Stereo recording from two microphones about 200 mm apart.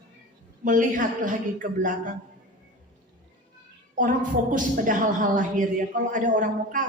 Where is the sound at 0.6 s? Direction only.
40° right (ahead or behind).